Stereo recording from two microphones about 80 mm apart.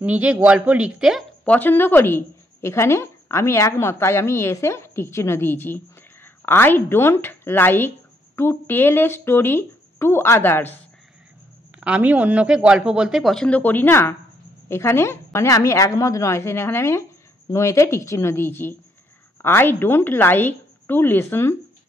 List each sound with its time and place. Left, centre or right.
0.0 s speech: centre
1.4 s a woman's voice: centre
11.8 s speech: centre
13.3 s speech: centre
13.6 s a woman's voice: left